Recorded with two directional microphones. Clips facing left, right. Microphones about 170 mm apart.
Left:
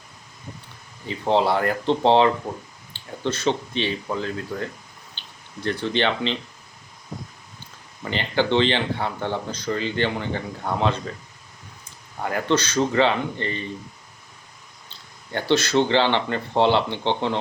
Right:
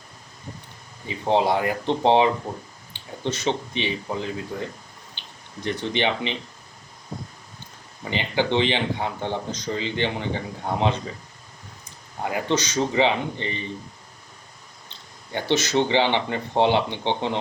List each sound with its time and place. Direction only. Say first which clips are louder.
1.0 s speech: left 1 dB; 15° right (ahead or behind)
5.2 s a sound: right 1 dB; 15° right (ahead or behind)
5.6 s speech: left 1 dB; 15° right (ahead or behind)
8.1 s speech: left 1 dB; 15° right (ahead or behind)
12.3 s speech: left 2 dB; 15° right (ahead or behind)
14.8 s speech: left 1 dB; 15° right (ahead or behind)